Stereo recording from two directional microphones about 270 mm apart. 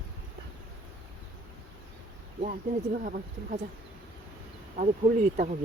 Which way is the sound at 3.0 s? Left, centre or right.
Right.